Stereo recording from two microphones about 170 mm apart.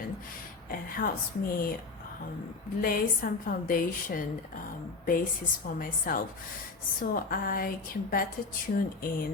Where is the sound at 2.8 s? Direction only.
55° left (ahead or behind).